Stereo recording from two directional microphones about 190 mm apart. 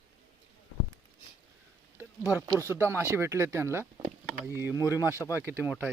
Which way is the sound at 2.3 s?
15° right (ahead or behind).